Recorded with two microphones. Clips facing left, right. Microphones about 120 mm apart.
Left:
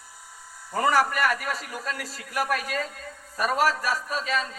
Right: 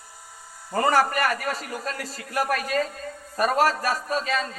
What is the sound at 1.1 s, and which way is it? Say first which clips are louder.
Speech: right 1 dB; 50° right (ahead or behind).